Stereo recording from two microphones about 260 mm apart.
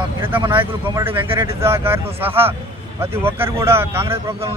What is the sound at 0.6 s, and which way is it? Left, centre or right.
Speech, centre.